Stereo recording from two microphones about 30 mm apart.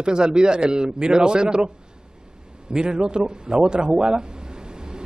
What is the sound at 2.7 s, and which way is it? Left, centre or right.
A man's voice, right.